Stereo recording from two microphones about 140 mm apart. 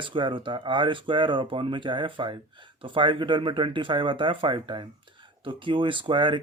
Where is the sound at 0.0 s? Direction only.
35° right (ahead or behind).